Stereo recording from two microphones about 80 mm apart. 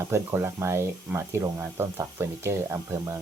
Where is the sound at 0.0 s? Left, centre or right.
Right.